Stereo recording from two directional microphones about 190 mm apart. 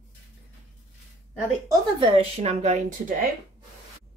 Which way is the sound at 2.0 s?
30° right (ahead or behind).